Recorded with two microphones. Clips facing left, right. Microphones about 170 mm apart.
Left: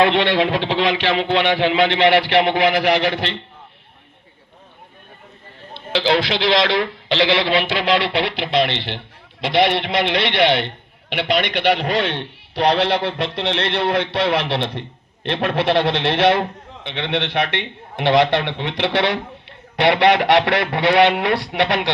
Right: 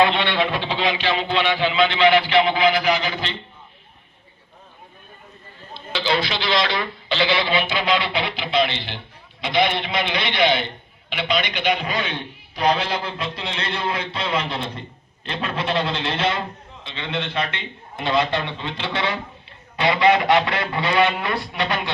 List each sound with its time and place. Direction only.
0.0 s a man's voice: 70° left (ahead or behind)
5.7 s a man's voice: 85° left